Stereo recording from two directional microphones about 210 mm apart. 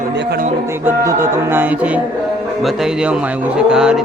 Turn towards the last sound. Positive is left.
turn(degrees=-5)  # may be behind; listen again after turning